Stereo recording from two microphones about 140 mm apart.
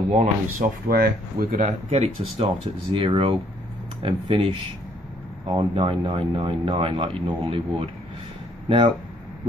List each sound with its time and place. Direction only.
0.1 s speech: 55° right (ahead or behind)
0.8 s speech: 90° right; by 8.9 s 40° right (ahead or behind)